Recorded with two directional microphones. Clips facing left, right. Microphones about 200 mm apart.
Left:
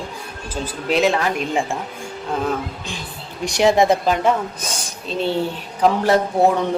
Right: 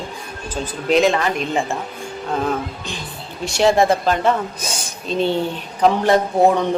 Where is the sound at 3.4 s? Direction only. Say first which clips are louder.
Even; 15° left (ahead or behind).